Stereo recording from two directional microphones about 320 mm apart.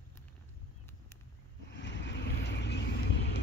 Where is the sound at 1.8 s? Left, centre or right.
Left.